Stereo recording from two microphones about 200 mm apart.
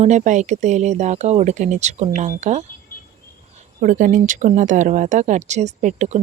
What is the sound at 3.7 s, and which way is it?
Speech, 40° right (ahead or behind).